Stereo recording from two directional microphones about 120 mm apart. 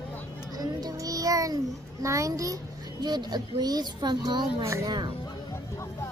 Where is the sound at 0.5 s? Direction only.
30° right (ahead or behind).